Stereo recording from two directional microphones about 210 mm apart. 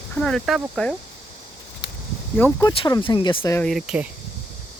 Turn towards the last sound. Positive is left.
turn(degrees=-5)  # may be behind; listen again after turning